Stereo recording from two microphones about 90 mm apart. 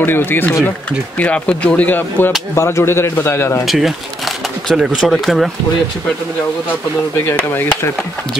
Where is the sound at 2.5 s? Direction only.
30° left (ahead or behind).